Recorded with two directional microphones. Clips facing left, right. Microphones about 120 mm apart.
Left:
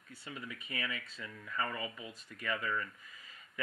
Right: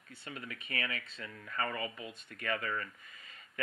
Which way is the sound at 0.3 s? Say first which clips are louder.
Right 1 dB; 70° right (ahead or behind).